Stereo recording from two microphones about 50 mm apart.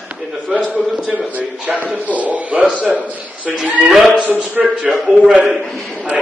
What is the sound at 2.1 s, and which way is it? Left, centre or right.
Speech, right.